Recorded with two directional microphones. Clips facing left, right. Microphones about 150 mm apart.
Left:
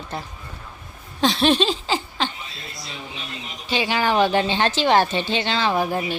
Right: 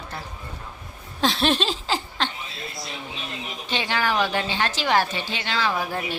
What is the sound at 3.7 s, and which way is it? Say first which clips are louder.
A woman's voice: left 4 dB; 10° left (ahead or behind).